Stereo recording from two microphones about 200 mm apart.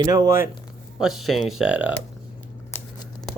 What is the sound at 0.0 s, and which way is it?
Speech, 20° right (ahead or behind).